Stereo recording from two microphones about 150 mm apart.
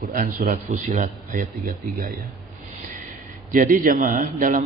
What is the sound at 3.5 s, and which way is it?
A man's voice, 65° right (ahead or behind).